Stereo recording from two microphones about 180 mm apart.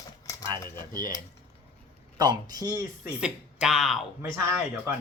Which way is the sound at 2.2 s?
20° right (ahead or behind).